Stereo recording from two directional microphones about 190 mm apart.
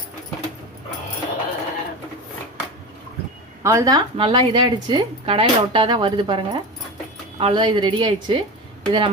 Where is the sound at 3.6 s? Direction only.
15° right (ahead or behind).